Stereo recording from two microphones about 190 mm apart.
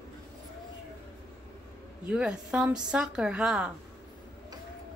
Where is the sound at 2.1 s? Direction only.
5° right (ahead or behind).